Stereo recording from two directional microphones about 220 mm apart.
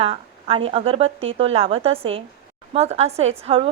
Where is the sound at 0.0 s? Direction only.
25° right (ahead or behind).